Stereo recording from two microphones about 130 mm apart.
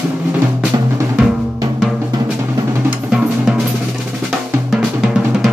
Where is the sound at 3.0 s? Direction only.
5° right (ahead or behind).